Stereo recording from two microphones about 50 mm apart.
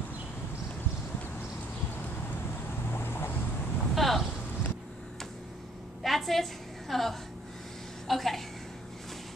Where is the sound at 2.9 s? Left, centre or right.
Left.